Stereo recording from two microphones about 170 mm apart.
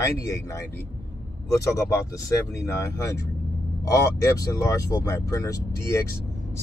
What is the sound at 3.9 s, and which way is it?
Speech, 20° left (ahead or behind).